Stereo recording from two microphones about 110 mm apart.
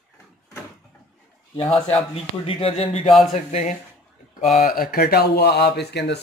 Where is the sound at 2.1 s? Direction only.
60° left (ahead or behind).